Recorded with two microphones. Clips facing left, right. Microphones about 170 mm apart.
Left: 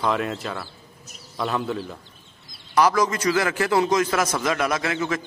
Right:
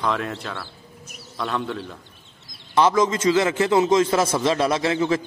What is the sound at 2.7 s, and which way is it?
A man's voice, 25° right (ahead or behind).